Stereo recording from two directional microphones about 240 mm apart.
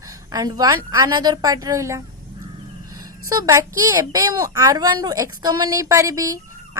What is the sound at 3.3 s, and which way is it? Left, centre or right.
A woman's voice, centre.